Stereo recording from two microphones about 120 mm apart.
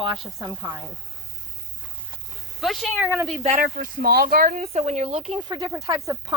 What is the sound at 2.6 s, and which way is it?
Speech, centre (ahead or behind).